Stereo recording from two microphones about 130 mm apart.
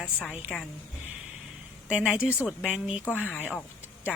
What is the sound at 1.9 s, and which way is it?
A woman's voice, 5° right (ahead or behind).